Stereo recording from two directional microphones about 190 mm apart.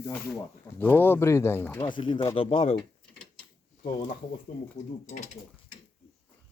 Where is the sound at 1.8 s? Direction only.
25° left (ahead or behind).